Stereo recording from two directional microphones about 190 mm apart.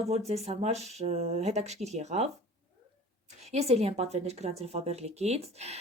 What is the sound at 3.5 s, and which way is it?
A woman's voice, 35° right (ahead or behind).